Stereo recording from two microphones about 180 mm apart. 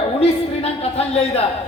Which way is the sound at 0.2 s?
35° left (ahead or behind).